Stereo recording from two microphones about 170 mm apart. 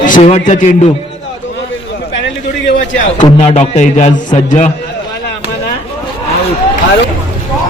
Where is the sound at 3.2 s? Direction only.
40° left (ahead or behind).